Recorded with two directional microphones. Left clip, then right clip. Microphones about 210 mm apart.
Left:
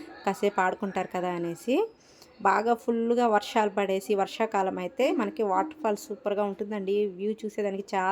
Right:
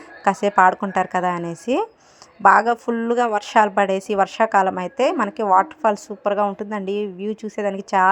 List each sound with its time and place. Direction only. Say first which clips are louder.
0.3 s a woman's voice: right 11 dB; 20° right (ahead or behind)